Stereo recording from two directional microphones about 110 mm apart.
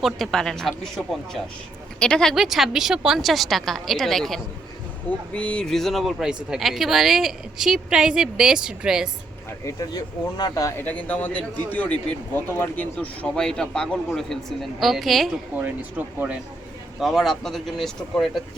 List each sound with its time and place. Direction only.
0.0 s speech: 5° left (ahead or behind)
9.6 s speech: 35° left (ahead or behind)
10.8 s speech: 15° left (ahead or behind)
16.1 s speech: 15° right (ahead or behind)
17.0 s speech: centre (ahead or behind)